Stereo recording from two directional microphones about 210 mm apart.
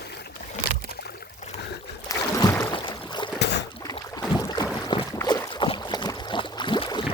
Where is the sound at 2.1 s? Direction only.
15° left (ahead or behind).